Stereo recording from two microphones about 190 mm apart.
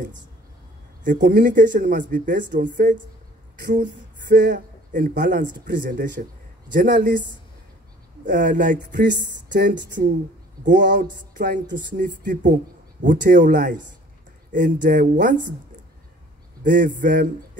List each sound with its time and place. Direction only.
1.0 s speech: 45° right (ahead or behind)
4.3 s speech: 45° right (ahead or behind)
10.8 s speech: 65° right (ahead or behind)
11.3 s speech: 45° right (ahead or behind)
16.6 s speech: 45° right (ahead or behind)